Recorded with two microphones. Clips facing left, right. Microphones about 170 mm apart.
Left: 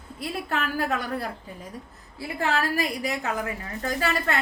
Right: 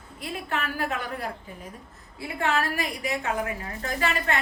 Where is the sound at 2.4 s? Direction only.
35° left (ahead or behind).